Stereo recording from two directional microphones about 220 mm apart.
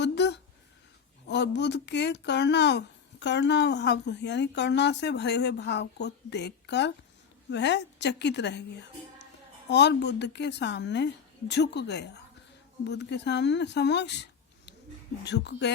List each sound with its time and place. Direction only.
0.0 s a sound: 50° left (ahead or behind)
1.3 s speech: 50° left (ahead or behind)
9.6 s speech: 50° left (ahead or behind)